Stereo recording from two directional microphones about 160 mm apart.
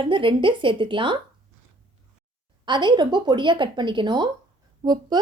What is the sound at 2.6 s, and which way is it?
Speech, 30° right (ahead or behind).